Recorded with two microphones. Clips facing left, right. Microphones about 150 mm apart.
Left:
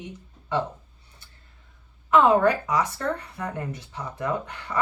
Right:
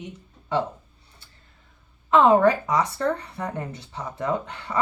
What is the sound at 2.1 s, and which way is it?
Speech, 25° right (ahead or behind).